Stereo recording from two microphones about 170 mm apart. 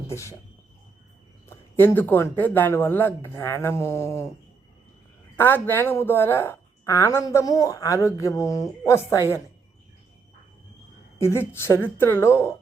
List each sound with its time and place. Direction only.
0.1 s a woman's voice: 15° left (ahead or behind)
1.5 s a woman's voice: 10° left (ahead or behind)
5.4 s a woman's voice: 10° left (ahead or behind)
11.2 s a woman's voice: 15° left (ahead or behind)